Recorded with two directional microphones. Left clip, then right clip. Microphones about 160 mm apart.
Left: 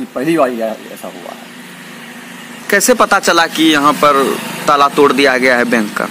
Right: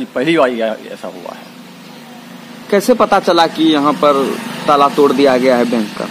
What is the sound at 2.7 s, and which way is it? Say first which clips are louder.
Speech: left 1 dB; 5° left (ahead or behind).